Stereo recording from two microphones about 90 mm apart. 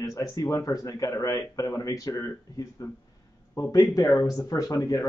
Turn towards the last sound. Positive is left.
turn(degrees=40)  # may be behind; listen again after turning